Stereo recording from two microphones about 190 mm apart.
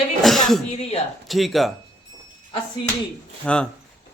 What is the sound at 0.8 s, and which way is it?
Speech, 30° left (ahead or behind).